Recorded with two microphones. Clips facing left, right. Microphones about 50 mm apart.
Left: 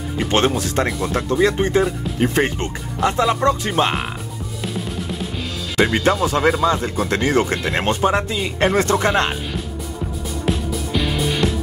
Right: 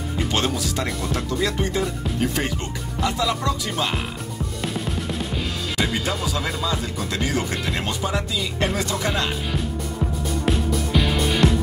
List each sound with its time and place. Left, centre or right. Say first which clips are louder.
0.3 s speech: left 7 dB; left
4.7 s music: left 2 dB; centre
5.8 s speech: left 9 dB; left
10.4 s music: left 1 dB; centre